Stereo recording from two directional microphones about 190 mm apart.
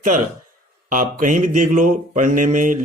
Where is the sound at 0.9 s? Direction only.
45° right (ahead or behind).